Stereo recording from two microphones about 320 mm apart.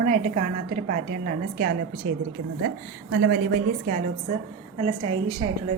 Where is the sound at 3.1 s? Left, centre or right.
Right.